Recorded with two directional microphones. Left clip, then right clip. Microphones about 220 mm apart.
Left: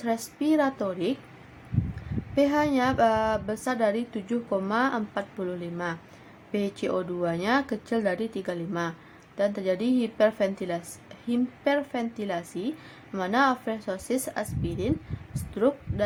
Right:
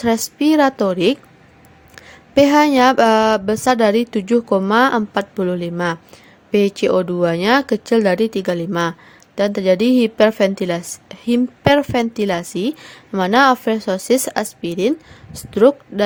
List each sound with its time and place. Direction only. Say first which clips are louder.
0.0 s speech: right 11 dB; 40° right (ahead or behind)
2.3 s speech: right 12 dB; 45° right (ahead or behind)